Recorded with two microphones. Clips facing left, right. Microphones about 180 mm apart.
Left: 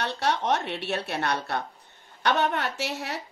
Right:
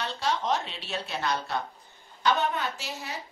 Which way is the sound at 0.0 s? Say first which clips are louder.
Left 3 dB; 65° left (ahead or behind).